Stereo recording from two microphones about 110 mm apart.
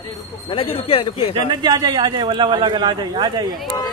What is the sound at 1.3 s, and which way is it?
A man's voice, 40° right (ahead or behind).